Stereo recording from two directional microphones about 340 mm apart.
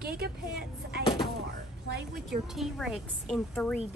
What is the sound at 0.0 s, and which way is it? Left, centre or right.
Vehicle, right.